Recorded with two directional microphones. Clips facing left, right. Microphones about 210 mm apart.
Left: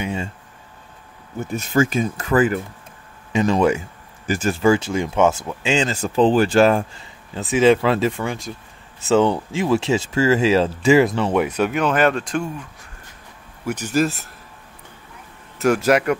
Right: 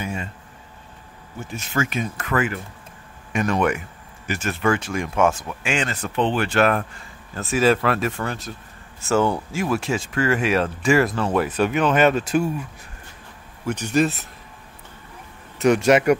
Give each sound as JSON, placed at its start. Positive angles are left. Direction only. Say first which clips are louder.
{"t": 0.0, "sound": "a sound", "louder": "left 4 dB", "side_deg": 25}
{"t": 1.4, "sound": "speech", "louder": "left 7 dB", "side_deg": 35}
{"t": 7.3, "sound": "speech", "louder": "left 4 dB", "side_deg": 20}
{"t": 8.2, "sound": "speech", "louder": "left 2 dB", "side_deg": 10}
{"t": 13.7, "sound": "speech", "louder": "even", "side_deg": 5}
{"t": 15.6, "sound": "speech", "louder": "right 1 dB", "side_deg": 0}